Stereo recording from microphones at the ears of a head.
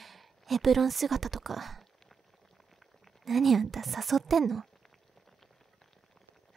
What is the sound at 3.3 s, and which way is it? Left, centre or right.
Speech, right.